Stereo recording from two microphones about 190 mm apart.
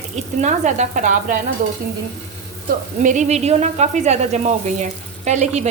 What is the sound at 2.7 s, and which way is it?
A woman's voice, 45° right (ahead or behind).